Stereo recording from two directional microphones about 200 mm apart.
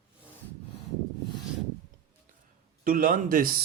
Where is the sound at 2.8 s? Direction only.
45° right (ahead or behind).